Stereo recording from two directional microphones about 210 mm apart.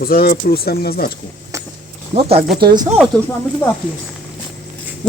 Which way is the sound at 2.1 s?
30° right (ahead or behind).